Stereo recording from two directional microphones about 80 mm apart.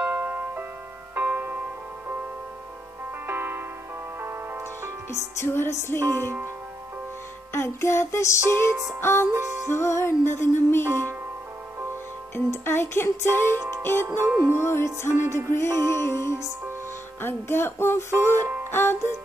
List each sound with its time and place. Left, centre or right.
0.0 s music: right
3.3 s music: right
5.4 s music: left
5.9 s speech: right
7.5 s music: left
10.9 s speech: right
12.4 s music: left
18.1 s speech: right
18.7 s music: left